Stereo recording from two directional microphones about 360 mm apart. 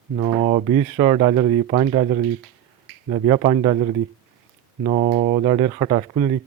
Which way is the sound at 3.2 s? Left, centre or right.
Centre.